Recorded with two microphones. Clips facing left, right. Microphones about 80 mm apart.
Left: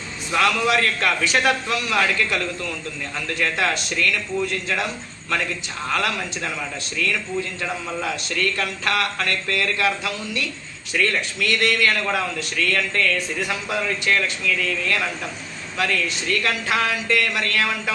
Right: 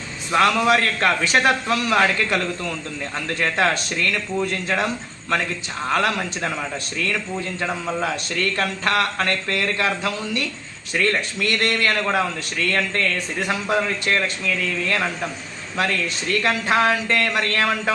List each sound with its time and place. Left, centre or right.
0.3 s a man's voice: right
5.9 s a man's voice: right